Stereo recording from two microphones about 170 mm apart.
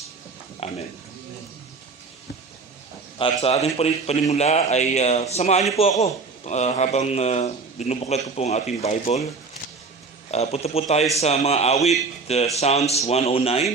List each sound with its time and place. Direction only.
0.6 s speech: 35° left (ahead or behind)
3.2 s speech: 35° left (ahead or behind)
10.3 s speech: 40° left (ahead or behind)